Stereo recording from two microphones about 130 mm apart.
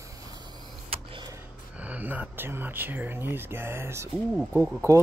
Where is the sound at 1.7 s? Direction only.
10° right (ahead or behind).